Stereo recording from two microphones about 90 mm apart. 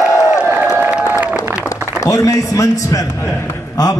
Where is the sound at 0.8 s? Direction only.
20° right (ahead or behind).